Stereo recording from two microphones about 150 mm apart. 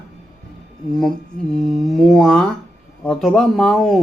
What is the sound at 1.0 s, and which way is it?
Mantra, 5° left (ahead or behind).